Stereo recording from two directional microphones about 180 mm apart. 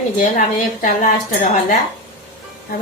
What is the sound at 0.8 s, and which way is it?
Speech, 45° left (ahead or behind).